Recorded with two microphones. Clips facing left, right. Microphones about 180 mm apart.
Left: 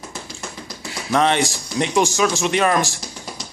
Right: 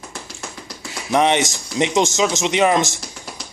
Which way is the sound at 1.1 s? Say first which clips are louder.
Right 1 dB; 20° right (ahead or behind).